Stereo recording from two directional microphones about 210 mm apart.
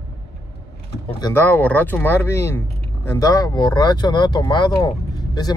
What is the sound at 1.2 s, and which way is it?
Speech, 10° left (ahead or behind).